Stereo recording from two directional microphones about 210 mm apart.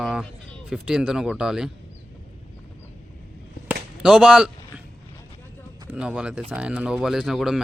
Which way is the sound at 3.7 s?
5° right (ahead or behind).